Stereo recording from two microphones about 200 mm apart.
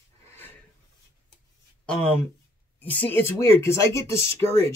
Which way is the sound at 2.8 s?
10° left (ahead or behind).